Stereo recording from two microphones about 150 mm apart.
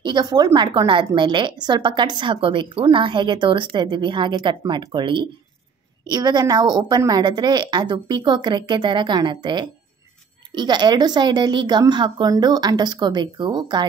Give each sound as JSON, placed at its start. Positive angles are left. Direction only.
{"t": 0.0, "sound": "a woman's voice", "side_deg": -30}